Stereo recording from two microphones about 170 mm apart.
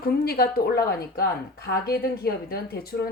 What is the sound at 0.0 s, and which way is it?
A woman's voice, 65° left (ahead or behind).